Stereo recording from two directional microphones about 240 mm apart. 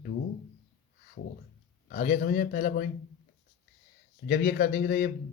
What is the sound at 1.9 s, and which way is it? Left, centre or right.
Speech, left.